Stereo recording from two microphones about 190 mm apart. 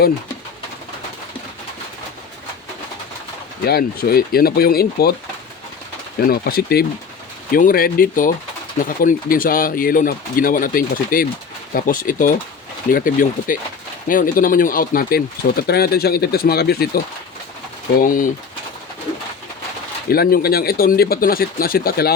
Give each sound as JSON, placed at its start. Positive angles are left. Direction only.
{"t": 3.6, "sound": "speech", "side_deg": 55}
{"t": 6.1, "sound": "speech", "side_deg": 55}
{"t": 18.0, "sound": "speech", "side_deg": 45}
{"t": 20.1, "sound": "speech", "side_deg": 55}